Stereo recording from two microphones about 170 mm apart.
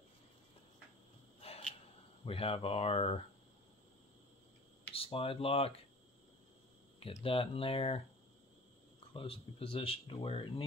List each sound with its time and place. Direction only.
2.2 s speech: 35° left (ahead or behind)
4.9 s speech: 35° left (ahead or behind)
7.0 s speech: 35° left (ahead or behind)
9.1 s speech: 30° left (ahead or behind)